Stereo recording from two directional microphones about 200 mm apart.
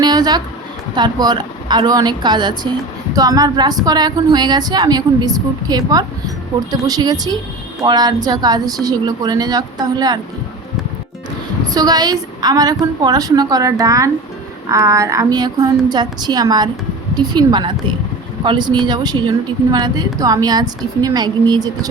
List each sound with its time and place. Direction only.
0.0 s a sound: 20° right (ahead or behind)
0.9 s a woman's voice: 20° right (ahead or behind)
11.7 s a woman's voice: 20° right (ahead or behind)